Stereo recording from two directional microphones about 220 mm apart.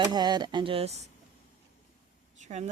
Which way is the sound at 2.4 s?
30° right (ahead or behind).